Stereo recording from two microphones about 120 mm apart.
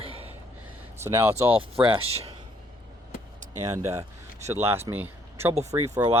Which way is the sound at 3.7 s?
25° right (ahead or behind).